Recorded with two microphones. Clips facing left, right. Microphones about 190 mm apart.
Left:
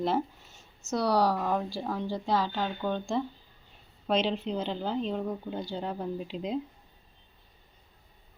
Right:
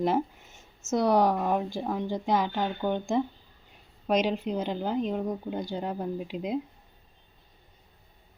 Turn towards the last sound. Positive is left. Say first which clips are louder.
# right 2 dB
turn(degrees=-10)  # may be behind; listen again after turning